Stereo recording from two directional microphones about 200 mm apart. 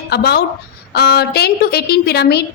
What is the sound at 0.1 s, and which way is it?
A woman's voice, 55° left (ahead or behind).